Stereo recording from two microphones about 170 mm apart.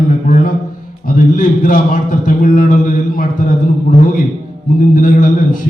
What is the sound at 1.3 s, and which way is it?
Mantra, 50° left (ahead or behind).